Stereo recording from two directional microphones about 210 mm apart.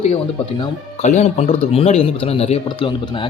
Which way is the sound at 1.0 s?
35° left (ahead or behind).